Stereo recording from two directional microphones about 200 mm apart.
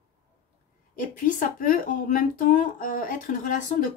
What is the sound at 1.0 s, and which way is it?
Speech, 45° left (ahead or behind).